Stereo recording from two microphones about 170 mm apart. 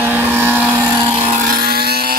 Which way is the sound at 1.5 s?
65° right (ahead or behind).